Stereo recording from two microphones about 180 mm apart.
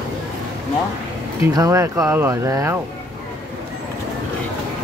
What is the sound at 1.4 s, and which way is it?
Speech, 20° right (ahead or behind).